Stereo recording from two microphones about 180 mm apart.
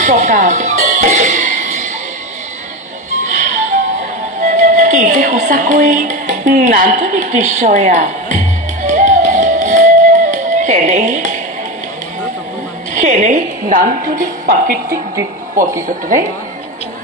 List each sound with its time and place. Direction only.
0.0 s music: 40° right (ahead or behind)
3.3 s music: 45° right (ahead or behind)
4.4 s speech: 45° right (ahead or behind)
8.8 s music: 45° right (ahead or behind)
12.9 s a woman's voice: 45° right (ahead or behind)